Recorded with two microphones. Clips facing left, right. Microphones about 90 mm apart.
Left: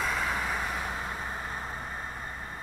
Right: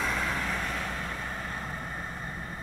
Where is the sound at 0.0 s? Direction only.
5° left (ahead or behind).